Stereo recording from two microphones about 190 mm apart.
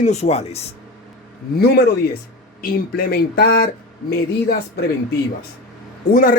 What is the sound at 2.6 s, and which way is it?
Speech, 50° left (ahead or behind).